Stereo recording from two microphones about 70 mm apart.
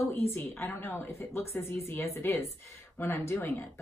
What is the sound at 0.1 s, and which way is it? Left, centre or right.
A woman's voice, left.